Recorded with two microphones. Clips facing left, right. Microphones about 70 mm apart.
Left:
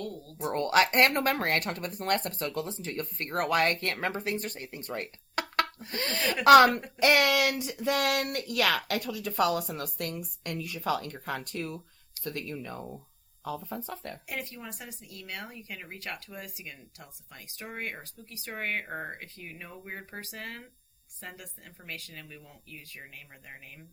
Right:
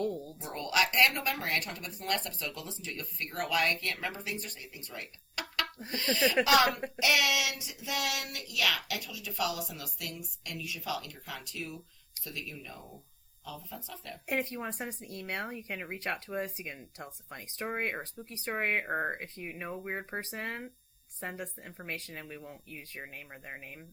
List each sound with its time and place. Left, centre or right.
0.0 s a sound: right
0.5 s speech: left
14.3 s speech: right